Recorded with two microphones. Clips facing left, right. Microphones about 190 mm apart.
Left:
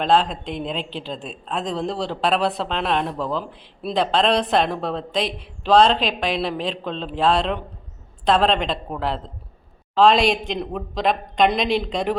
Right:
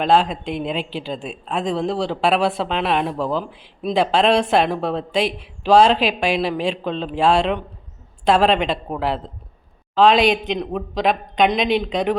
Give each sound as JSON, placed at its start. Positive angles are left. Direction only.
{"t": 0.0, "sound": "speech", "side_deg": -5}